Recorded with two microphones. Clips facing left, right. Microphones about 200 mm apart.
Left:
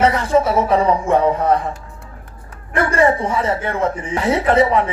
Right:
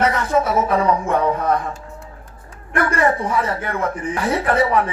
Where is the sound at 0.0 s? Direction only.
30° left (ahead or behind).